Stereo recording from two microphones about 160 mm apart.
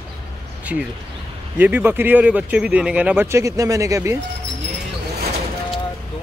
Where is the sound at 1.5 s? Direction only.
10° right (ahead or behind).